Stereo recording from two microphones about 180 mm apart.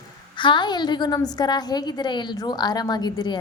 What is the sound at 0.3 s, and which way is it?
A woman's voice, 25° left (ahead or behind).